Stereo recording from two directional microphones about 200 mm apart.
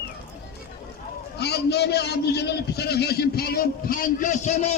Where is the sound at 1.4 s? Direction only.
55° left (ahead or behind); by 4.7 s 35° left (ahead or behind).